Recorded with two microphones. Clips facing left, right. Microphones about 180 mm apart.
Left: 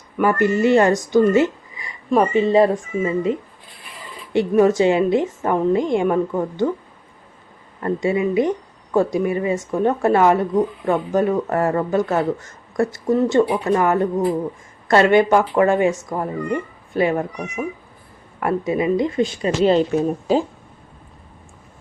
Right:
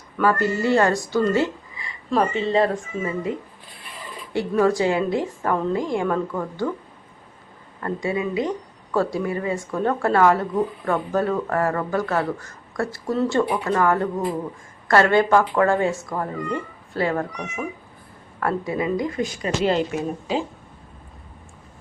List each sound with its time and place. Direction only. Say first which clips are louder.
0.2 s speech: left 4 dB; 20° left (ahead or behind)
1.3 s a sound: left 5 dB; 20° left (ahead or behind)
3.0 s speech: left 7 dB; 20° left (ahead or behind)
7.8 s speech: left 5 dB; 20° left (ahead or behind)
18.3 s speech: left 4 dB; 20° left (ahead or behind)
19.9 s speech: left 7 dB; 40° left (ahead or behind)